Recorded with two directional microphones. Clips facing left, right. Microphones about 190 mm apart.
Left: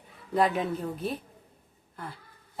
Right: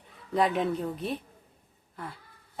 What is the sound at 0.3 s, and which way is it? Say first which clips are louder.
Speech: even; centre (ahead or behind).